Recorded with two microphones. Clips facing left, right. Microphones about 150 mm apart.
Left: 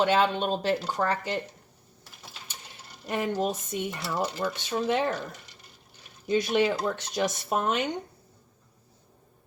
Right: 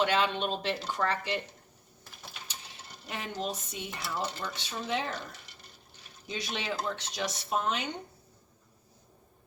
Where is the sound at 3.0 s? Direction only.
50° left (ahead or behind).